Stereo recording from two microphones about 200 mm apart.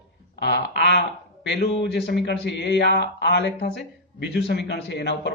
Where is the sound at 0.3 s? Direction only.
60° left (ahead or behind).